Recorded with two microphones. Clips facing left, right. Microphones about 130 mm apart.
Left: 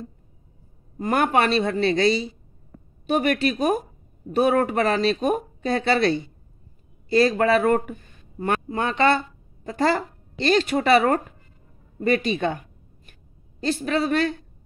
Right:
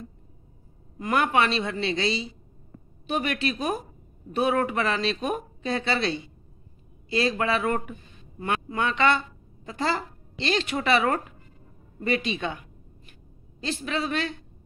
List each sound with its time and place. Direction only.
0.9 s speech: 40° left (ahead or behind)
12.0 s a sound: 45° left (ahead or behind)
13.6 s speech: 45° left (ahead or behind)